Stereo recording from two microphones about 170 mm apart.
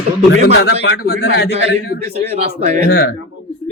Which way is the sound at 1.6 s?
75° left (ahead or behind).